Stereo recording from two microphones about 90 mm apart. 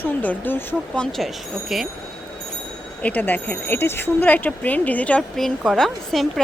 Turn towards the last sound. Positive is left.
turn(degrees=5)  # may be behind; listen again after turning